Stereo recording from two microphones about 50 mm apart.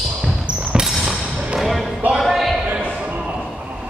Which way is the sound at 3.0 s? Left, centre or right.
Right.